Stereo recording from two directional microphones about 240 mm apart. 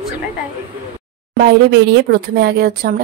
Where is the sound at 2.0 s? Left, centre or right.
Right.